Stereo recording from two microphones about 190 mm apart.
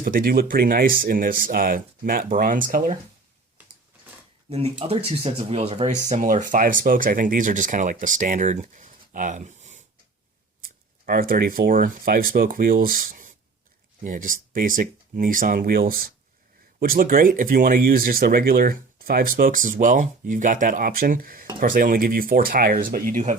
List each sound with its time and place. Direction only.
0.0 s speech: 50° right (ahead or behind)
4.4 s speech: 30° right (ahead or behind)
10.6 s speech: 50° right (ahead or behind)